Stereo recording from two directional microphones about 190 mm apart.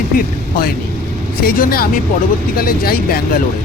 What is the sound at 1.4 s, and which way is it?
Speech, 50° left (ahead or behind).